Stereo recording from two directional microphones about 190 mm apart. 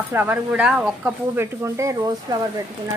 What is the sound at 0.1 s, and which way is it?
A woman's voice, 10° right (ahead or behind).